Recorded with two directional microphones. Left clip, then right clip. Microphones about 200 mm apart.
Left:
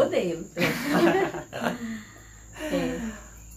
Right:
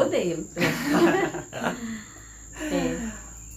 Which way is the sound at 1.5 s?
15° left (ahead or behind).